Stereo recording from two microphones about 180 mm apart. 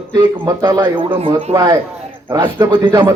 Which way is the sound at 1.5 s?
20° right (ahead or behind).